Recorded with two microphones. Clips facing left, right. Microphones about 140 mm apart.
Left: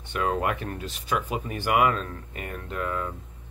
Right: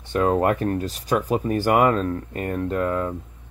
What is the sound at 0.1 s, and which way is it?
Speech, 35° right (ahead or behind).